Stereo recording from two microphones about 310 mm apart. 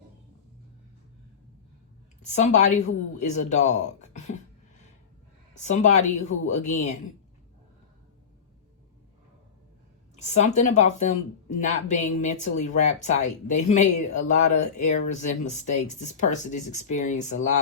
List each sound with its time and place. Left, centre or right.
2.2 s speech: left
5.6 s speech: left
10.2 s speech: left